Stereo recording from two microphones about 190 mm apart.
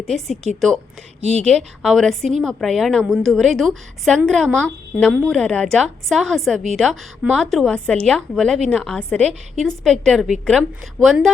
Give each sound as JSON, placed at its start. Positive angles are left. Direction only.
{"t": 0.0, "sound": "a woman's voice", "side_deg": 0}
{"t": 1.4, "sound": "a woman's voice", "side_deg": 5}